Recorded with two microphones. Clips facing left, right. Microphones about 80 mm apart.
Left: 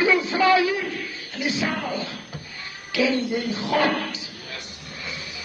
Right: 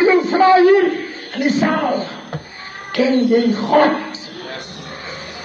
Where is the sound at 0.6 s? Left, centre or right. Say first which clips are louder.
Right 15 dB; right.